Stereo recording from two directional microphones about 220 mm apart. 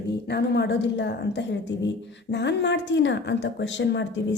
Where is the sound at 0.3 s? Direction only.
50° left (ahead or behind).